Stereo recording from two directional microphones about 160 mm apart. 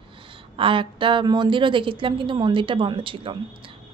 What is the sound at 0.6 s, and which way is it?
A woman's voice, 35° right (ahead or behind).